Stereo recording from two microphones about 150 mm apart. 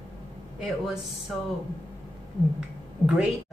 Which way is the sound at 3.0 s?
5° right (ahead or behind).